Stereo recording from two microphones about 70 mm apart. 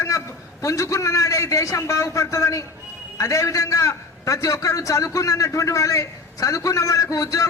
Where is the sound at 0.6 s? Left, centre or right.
Left.